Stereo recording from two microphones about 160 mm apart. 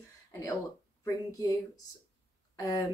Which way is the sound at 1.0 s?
20° left (ahead or behind).